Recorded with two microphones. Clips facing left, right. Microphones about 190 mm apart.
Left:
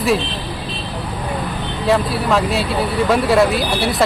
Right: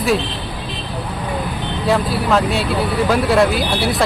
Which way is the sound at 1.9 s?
Centre (ahead or behind).